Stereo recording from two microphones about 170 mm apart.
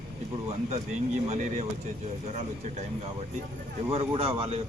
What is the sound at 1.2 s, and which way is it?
Speech, 40° right (ahead or behind).